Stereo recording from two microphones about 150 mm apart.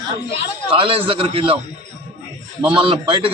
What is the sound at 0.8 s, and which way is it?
Speech, 35° right (ahead or behind).